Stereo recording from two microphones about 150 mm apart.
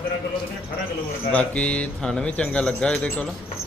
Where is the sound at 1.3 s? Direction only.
10° left (ahead or behind).